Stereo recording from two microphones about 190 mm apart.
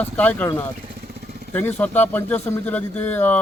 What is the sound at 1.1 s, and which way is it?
Vehicle, 55° right (ahead or behind).